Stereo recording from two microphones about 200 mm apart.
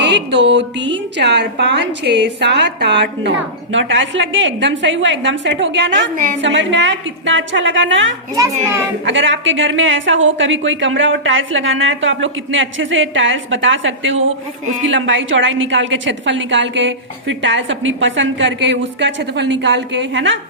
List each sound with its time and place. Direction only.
0.0 s a woman's voice: 60° right (ahead or behind)